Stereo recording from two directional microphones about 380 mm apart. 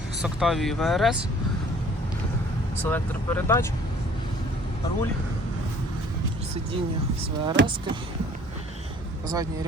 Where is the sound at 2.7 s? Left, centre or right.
Centre.